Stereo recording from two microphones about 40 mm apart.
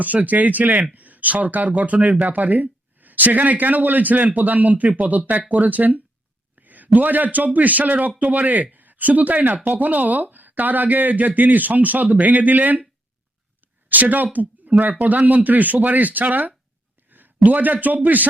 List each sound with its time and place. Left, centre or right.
0.0 s a man's voice: right
13.8 s a man's voice: right